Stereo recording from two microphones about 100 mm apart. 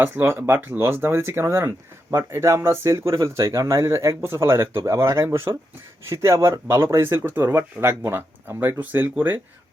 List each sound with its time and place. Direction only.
0.0 s speech: 20° right (ahead or behind)